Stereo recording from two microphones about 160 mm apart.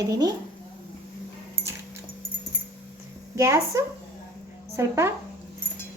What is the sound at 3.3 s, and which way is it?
Speech, 20° right (ahead or behind).